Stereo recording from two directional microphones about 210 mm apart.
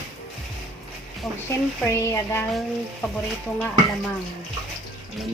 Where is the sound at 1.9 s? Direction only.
10° left (ahead or behind).